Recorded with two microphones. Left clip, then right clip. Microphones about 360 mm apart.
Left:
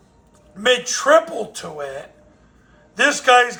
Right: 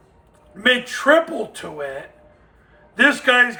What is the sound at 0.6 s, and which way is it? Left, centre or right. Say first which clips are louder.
Speech: even; centre.